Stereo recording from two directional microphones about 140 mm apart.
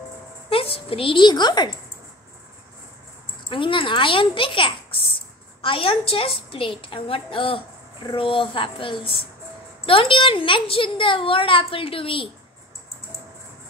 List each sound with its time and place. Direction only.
0.5 s a child's voice: 40° left (ahead or behind)
3.4 s a child's voice: 35° left (ahead or behind)